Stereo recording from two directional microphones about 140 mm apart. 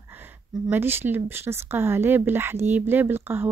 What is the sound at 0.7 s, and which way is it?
Speech, 15° right (ahead or behind).